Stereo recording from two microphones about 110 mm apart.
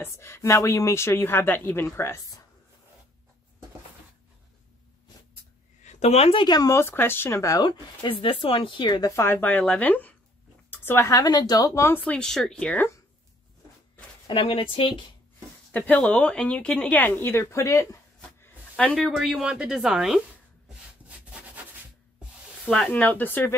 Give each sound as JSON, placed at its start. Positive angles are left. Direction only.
{"t": 0.0, "sound": "a woman's voice", "side_deg": 25}
{"t": 5.9, "sound": "speech", "side_deg": 90}
{"t": 6.3, "sound": "speech", "side_deg": 40}
{"t": 6.7, "sound": "a woman's voice", "side_deg": 25}
{"t": 8.0, "sound": "speech", "side_deg": 55}
{"t": 9.1, "sound": "a woman's voice", "side_deg": 20}
{"t": 12.0, "sound": "speech", "side_deg": 10}
{"t": 14.3, "sound": "speech", "side_deg": 55}
{"t": 15.7, "sound": "speech", "side_deg": 15}
{"t": 18.4, "sound": "a sound", "side_deg": 10}
{"t": 19.0, "sound": "speech", "side_deg": 0}
{"t": 22.7, "sound": "speech", "side_deg": 10}